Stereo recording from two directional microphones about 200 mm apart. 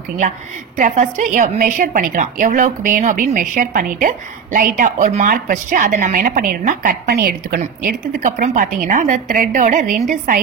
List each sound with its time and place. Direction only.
0.7 s a woman's voice: 35° right (ahead or behind)